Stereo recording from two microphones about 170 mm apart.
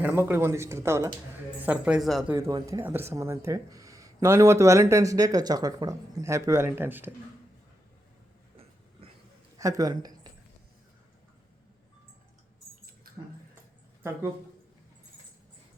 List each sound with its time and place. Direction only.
0.0 s speech: 15° right (ahead or behind)
2.3 s speech: 20° right (ahead or behind)
9.6 s speech: 20° right (ahead or behind)